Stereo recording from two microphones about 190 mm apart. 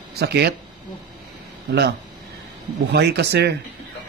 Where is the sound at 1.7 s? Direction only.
65° right (ahead or behind).